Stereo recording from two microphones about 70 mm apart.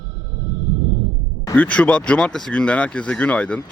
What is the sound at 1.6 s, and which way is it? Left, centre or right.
Speech, centre.